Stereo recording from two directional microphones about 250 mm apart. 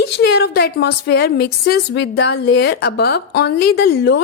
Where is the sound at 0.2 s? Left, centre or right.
Left.